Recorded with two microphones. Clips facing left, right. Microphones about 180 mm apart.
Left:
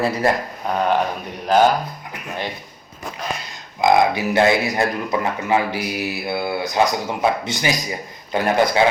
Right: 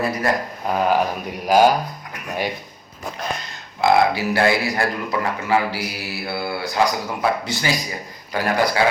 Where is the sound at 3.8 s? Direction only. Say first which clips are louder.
Left 1 dB; 20° left (ahead or behind).